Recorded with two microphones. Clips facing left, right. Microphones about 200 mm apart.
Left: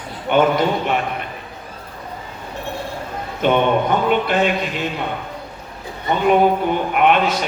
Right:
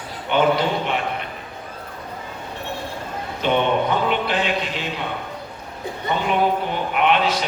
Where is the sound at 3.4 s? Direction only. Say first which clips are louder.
Left 3 dB; 50° left (ahead or behind).